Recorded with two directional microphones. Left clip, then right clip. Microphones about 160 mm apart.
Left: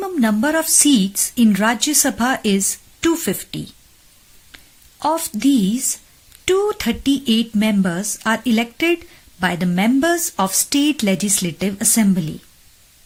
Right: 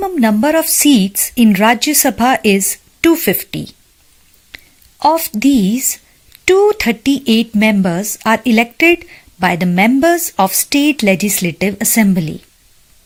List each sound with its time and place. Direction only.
0.0 s a woman's voice: 20° right (ahead or behind)